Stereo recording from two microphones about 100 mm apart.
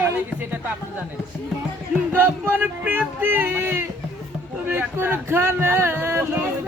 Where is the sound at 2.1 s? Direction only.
15° right (ahead or behind).